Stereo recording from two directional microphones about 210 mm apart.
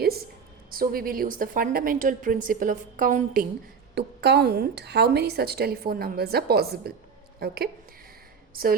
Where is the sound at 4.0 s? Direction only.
55° right (ahead or behind).